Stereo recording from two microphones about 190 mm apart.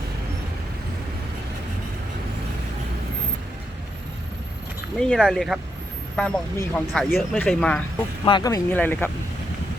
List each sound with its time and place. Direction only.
4.9 s speech: 5° left (ahead or behind)
8.2 s speech: 25° left (ahead or behind)